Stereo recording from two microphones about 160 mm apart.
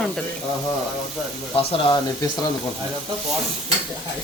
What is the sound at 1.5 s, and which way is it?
Speech, 35° left (ahead or behind).